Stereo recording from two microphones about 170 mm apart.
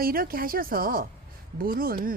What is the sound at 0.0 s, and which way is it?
Speech, 60° right (ahead or behind).